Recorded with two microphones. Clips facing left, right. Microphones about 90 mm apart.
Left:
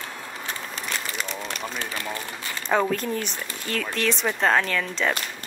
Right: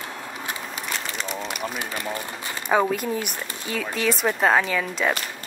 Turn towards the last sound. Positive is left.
turn(degrees=-5)  # may be behind; listen again after turning